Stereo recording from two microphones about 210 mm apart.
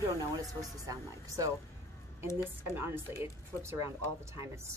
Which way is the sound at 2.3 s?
15° left (ahead or behind).